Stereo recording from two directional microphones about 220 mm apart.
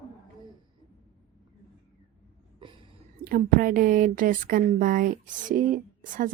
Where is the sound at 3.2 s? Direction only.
40° right (ahead or behind).